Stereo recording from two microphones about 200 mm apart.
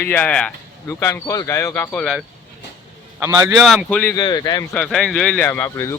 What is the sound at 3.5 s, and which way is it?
Speech, centre (ahead or behind).